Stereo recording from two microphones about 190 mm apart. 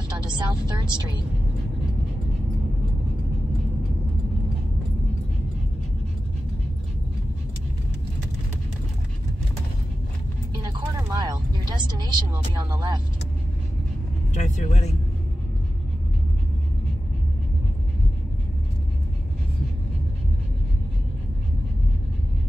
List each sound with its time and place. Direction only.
0.1 s speech: 25° right (ahead or behind)
10.6 s vehicle: 20° right (ahead or behind)
14.3 s speech: 40° left (ahead or behind)